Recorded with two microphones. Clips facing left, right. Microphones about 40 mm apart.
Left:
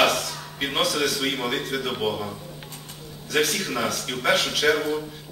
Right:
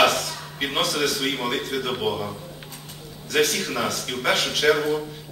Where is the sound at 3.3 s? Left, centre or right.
Centre.